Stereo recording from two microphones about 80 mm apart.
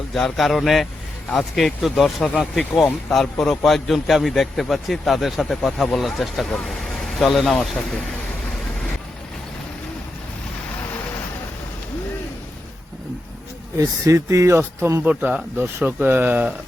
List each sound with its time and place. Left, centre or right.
0.1 s a man's voice: centre
13.7 s speech: right
15.0 s speech: centre
15.5 s speech: right